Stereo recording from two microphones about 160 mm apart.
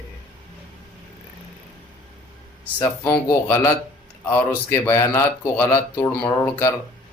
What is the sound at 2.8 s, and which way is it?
Speech, 15° left (ahead or behind).